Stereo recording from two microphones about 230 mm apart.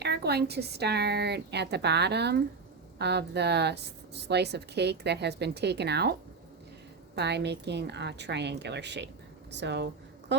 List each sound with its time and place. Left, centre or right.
0.0 s speech: right
7.2 s a woman's voice: right